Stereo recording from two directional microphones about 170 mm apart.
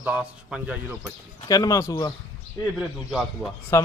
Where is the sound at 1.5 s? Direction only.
20° left (ahead or behind).